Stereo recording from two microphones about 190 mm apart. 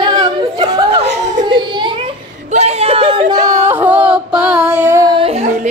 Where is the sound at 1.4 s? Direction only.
25° right (ahead or behind); by 4.8 s 5° right (ahead or behind).